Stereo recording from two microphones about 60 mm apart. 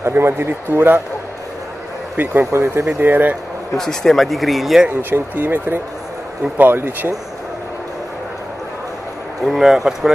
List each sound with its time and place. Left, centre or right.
0.1 s speech: right
2.1 s speech: right
3.0 s speech: right
3.7 s speech: centre
5.1 s speech: right
9.4 s speech: centre